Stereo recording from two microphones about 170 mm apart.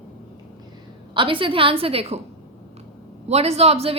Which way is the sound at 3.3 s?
40° right (ahead or behind).